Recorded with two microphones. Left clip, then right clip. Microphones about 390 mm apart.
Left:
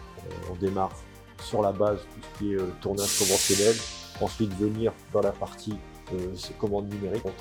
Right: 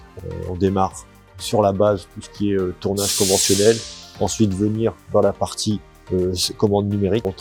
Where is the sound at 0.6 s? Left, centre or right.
Right.